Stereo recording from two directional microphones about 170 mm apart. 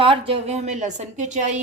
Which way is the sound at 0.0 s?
30° right (ahead or behind).